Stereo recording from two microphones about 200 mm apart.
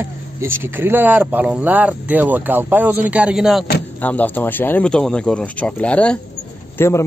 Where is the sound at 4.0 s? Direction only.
10° left (ahead or behind).